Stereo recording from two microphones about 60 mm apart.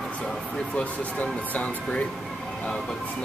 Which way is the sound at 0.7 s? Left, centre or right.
Left.